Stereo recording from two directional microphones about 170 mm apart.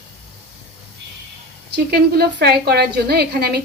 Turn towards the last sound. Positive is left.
turn(degrees=-70)  # may be behind; listen again after turning